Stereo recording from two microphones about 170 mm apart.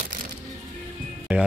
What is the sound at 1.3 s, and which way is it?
Speech, 10° right (ahead or behind).